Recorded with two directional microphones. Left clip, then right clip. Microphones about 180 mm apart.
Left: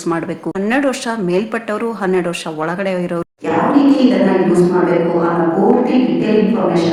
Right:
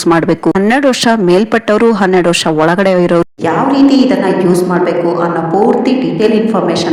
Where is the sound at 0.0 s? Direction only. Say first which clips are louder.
Right 10 dB; 45° right (ahead or behind).